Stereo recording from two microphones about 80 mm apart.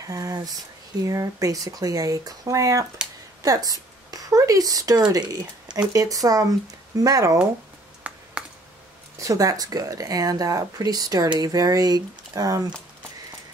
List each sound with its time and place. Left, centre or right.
0.0 s speech: right
5.8 s speech: right
8.0 s computer keyboard: centre
9.2 s speech: right